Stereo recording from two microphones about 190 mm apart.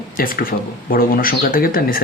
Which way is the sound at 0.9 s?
50° left (ahead or behind).